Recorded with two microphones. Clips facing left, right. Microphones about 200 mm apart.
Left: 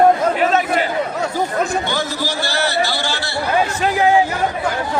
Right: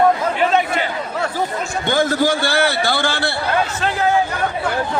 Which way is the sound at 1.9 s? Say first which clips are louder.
Right 6 dB; 50° right (ahead or behind).